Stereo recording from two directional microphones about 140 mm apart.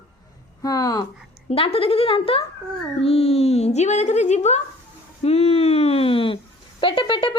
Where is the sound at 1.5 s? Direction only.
40° left (ahead or behind).